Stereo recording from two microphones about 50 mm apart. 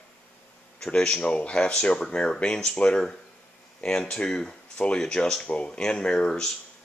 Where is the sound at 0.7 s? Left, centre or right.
Centre.